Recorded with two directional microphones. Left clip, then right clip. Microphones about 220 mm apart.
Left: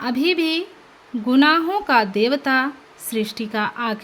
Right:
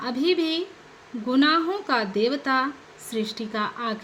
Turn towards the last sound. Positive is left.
turn(degrees=35)  # may be behind; listen again after turning